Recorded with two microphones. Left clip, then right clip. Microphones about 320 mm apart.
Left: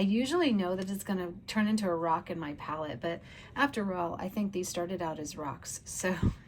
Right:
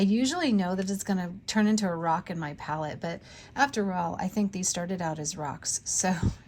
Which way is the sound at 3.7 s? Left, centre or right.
Right.